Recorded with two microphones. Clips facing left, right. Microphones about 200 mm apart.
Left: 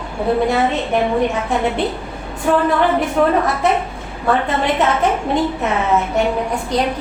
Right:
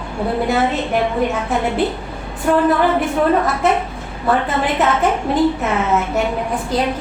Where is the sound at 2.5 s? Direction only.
5° right (ahead or behind).